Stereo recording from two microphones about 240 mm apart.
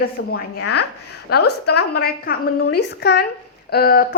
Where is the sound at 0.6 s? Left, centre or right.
Left.